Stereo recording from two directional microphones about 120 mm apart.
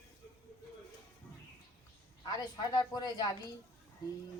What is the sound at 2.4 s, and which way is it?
Speech, 35° left (ahead or behind).